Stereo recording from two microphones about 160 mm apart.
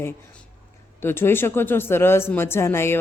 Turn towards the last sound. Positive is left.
turn(degrees=15)  # may be behind; listen again after turning